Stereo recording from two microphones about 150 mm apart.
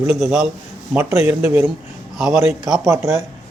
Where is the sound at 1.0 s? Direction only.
15° right (ahead or behind).